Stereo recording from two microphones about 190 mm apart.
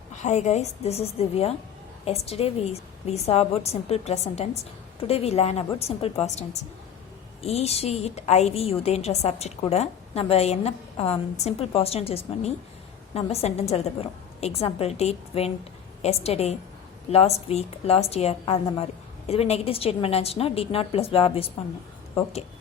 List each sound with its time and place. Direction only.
0.2 s a woman's voice: 40° left (ahead or behind)